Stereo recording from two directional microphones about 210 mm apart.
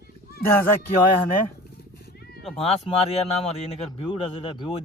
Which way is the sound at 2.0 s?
50° left (ahead or behind).